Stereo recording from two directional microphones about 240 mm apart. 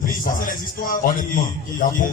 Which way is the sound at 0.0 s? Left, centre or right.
Left.